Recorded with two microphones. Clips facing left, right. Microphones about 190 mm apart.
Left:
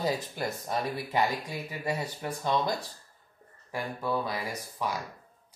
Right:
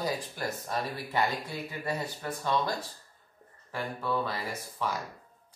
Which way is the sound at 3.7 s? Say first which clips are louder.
Left 1 dB; 10° left (ahead or behind).